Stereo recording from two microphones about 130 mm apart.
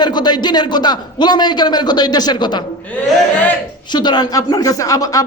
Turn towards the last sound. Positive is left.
turn(degrees=25)  # may be behind; listen again after turning